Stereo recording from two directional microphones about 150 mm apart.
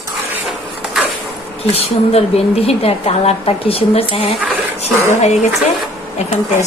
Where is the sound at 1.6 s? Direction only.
40° left (ahead or behind).